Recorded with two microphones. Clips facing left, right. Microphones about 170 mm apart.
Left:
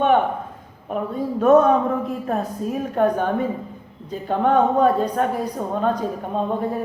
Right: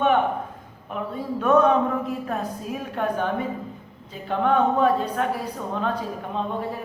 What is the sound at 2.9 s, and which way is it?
A woman's voice, 40° left (ahead or behind).